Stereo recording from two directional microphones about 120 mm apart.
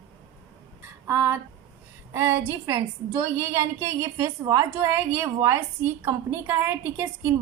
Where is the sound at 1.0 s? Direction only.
25° right (ahead or behind).